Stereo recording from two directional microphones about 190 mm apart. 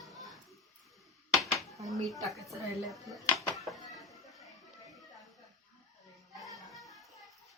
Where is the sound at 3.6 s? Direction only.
Centre (ahead or behind).